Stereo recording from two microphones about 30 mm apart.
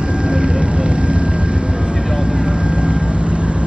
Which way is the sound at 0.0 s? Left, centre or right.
Right.